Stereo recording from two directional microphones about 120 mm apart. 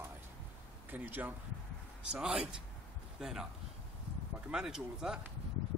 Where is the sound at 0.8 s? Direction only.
15° right (ahead or behind).